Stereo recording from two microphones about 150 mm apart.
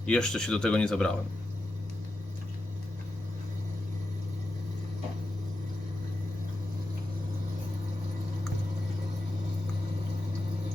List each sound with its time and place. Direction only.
0.0 s speech: 5° left (ahead or behind)